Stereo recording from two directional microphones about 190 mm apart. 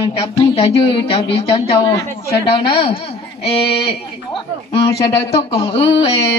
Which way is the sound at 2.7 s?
25° left (ahead or behind).